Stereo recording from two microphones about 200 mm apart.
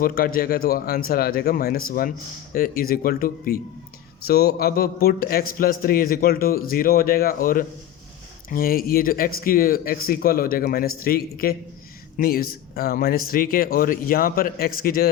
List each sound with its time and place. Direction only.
0.0 s speech: 45° left (ahead or behind)